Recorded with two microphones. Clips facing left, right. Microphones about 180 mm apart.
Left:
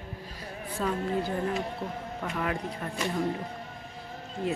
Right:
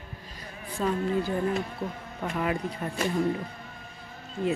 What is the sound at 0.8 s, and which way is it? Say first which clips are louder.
Speech: right 2 dB; 5° right (ahead or behind).